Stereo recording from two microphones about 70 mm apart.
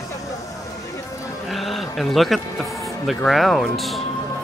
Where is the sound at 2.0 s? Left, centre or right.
Centre.